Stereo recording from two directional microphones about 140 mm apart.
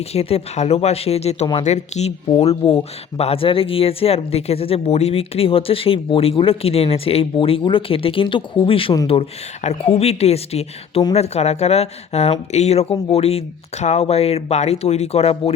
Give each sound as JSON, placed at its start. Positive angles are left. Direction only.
{"t": 0.0, "sound": "speech", "side_deg": 45}